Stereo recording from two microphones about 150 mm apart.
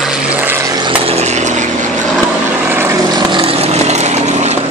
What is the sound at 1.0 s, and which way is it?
Vehicle, 45° right (ahead or behind).